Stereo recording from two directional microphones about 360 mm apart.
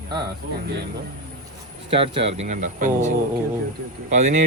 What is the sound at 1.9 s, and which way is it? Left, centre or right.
Speech, centre.